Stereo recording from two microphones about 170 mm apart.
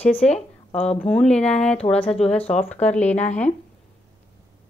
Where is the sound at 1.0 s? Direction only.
5° left (ahead or behind).